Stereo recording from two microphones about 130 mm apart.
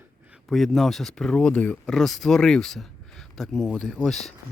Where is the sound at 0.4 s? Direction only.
Centre (ahead or behind).